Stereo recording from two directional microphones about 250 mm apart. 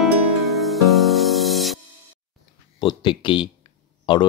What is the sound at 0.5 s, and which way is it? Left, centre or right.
Music, centre.